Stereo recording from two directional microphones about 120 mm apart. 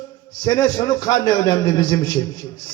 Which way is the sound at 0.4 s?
35° left (ahead or behind).